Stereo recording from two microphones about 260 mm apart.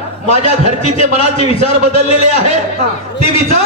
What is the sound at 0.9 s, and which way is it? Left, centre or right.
A man's voice, left.